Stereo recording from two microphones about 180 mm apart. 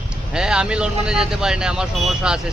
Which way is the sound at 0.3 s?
5° right (ahead or behind).